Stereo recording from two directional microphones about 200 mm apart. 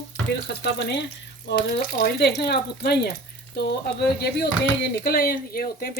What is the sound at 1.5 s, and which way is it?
Speech, 50° left (ahead or behind).